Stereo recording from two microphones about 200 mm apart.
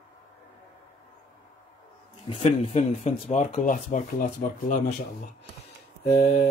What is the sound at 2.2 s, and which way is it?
Speech, 30° left (ahead or behind).